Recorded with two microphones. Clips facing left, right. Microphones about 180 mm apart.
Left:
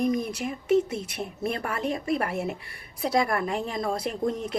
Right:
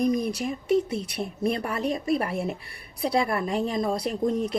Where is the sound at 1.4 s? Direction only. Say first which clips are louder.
Right 2 dB; 25° right (ahead or behind).